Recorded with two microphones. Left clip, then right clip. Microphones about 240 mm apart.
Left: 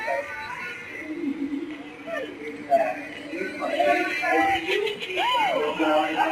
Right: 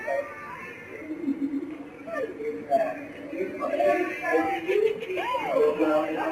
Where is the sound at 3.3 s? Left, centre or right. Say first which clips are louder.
Left 2 dB; centre.